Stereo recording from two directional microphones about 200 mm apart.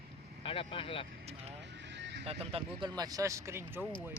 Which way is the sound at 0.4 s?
25° left (ahead or behind).